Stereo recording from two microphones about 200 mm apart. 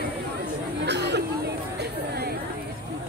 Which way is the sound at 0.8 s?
60° right (ahead or behind).